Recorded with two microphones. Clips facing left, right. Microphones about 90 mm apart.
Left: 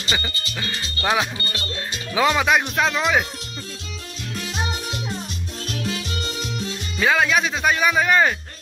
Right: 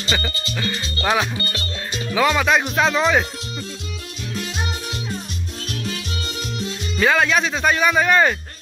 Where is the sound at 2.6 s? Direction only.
Centre (ahead or behind).